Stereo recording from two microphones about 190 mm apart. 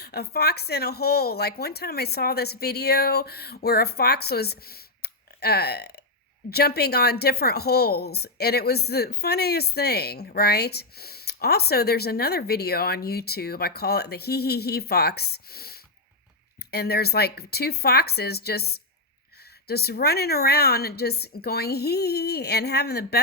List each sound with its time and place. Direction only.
0.0 s a woman's voice: 55° left (ahead or behind)